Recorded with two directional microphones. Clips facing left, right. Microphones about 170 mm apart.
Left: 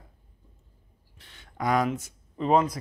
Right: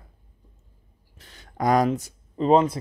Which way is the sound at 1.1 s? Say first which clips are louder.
Right 5 dB; 40° right (ahead or behind).